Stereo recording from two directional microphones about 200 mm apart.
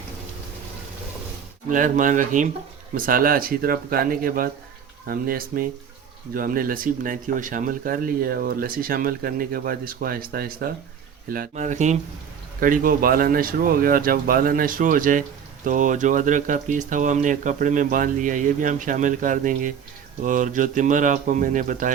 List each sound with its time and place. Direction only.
1.7 s speech: 40° right (ahead or behind)